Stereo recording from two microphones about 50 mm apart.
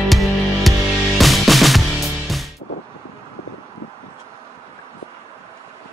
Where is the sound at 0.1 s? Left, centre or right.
Centre.